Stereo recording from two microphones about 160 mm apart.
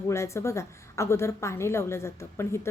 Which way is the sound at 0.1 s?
15° left (ahead or behind).